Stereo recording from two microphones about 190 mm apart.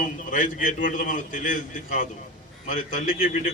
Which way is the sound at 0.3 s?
40° left (ahead or behind).